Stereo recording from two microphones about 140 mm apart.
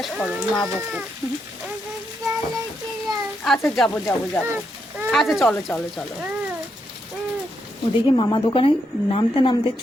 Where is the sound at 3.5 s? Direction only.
Centre (ahead or behind).